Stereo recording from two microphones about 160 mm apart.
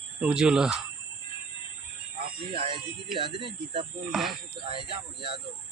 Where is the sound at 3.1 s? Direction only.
35° right (ahead or behind).